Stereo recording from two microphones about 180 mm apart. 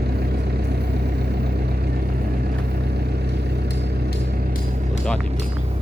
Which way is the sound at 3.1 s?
65° right (ahead or behind).